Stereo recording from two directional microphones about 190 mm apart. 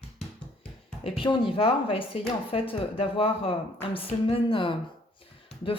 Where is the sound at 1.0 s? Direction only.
25° left (ahead or behind).